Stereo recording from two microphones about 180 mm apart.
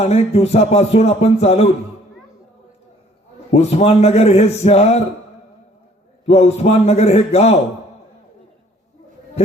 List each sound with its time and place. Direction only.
0.0 s speech: 35° left (ahead or behind)
3.5 s speech: 35° left (ahead or behind)
6.2 s speech: 35° left (ahead or behind)